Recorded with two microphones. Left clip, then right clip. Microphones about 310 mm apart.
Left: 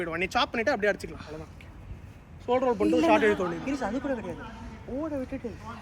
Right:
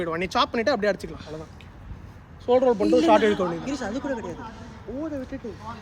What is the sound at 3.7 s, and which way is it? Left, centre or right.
Speech, centre.